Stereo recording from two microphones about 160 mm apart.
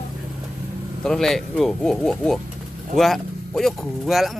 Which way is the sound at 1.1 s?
5° left (ahead or behind).